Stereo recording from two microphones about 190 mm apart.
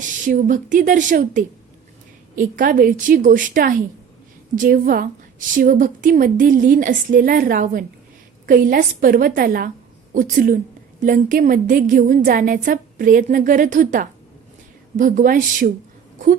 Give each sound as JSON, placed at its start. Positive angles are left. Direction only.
{"t": 0.0, "sound": "a woman's voice", "side_deg": -45}